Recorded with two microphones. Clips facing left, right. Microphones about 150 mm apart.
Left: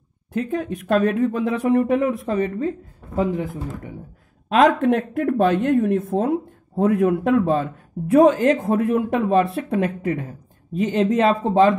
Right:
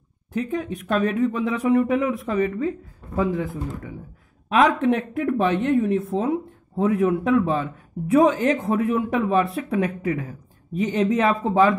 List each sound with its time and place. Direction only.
0.5 s speech: 40° left (ahead or behind)
1.1 s speech: 55° left (ahead or behind)
3.2 s speech: 20° left (ahead or behind)
4.5 s speech: 40° left (ahead or behind)